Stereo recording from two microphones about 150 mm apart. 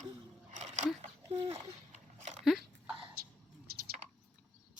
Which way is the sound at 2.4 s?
Centre (ahead or behind).